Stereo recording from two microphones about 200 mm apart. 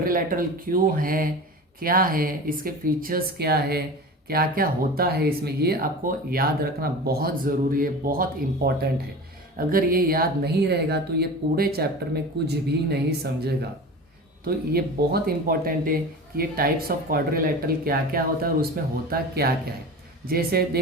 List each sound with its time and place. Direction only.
0.0 s speech: 45° right (ahead or behind)